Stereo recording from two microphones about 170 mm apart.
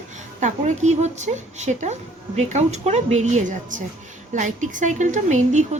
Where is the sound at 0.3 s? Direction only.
45° right (ahead or behind).